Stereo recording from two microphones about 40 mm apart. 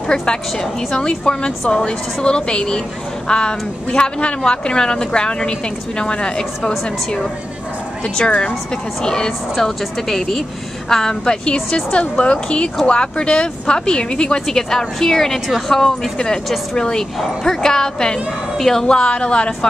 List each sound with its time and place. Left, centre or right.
0.1 s a woman's voice: centre
1.6 s a woman's voice: centre
1.9 s a woman's voice: left
9.0 s a woman's voice: centre
9.6 s a woman's voice: centre
18.9 s a woman's voice: left